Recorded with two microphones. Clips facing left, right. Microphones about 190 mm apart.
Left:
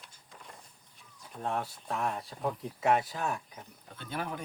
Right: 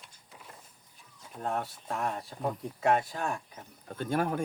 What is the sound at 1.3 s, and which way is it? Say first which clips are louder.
Speech: right 1 dB; centre (ahead or behind).